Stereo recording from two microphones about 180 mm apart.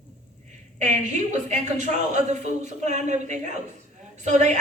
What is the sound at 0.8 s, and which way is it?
A woman's voice, 40° right (ahead or behind).